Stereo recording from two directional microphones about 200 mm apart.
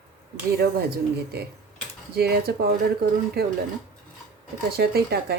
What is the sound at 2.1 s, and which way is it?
Speech, 50° right (ahead or behind).